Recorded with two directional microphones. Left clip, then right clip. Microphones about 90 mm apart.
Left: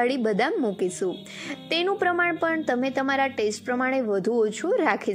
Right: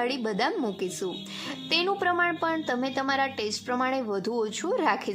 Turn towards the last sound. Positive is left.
turn(degrees=20)  # may be behind; listen again after turning